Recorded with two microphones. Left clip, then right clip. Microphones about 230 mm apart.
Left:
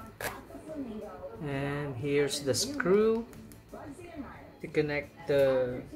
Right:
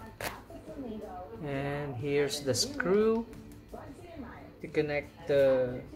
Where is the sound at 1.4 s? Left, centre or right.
Centre.